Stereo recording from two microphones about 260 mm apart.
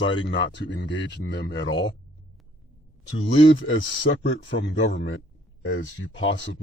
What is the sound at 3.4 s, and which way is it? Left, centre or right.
Speech, left.